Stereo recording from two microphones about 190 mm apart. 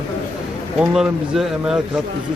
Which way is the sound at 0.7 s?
5° right (ahead or behind).